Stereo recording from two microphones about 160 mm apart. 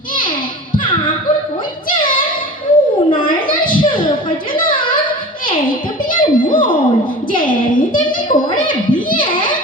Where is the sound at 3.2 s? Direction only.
60° left (ahead or behind).